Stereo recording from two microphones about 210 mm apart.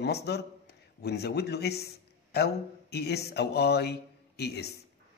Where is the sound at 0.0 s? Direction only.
50° left (ahead or behind).